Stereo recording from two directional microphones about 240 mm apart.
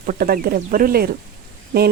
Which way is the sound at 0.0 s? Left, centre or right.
Right.